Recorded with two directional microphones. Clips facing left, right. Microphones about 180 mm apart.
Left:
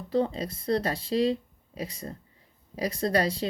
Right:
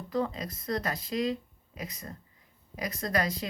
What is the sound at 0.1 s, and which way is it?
Speech, 30° left (ahead or behind).